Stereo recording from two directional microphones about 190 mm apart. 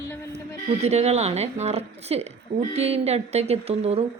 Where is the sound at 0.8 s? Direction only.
35° right (ahead or behind).